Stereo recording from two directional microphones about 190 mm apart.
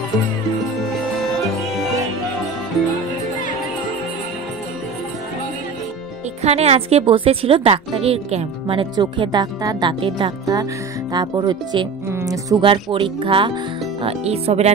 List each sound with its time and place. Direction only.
6.4 s a woman's voice: 35° right (ahead or behind)